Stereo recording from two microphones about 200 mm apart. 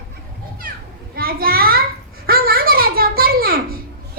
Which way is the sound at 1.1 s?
50° right (ahead or behind).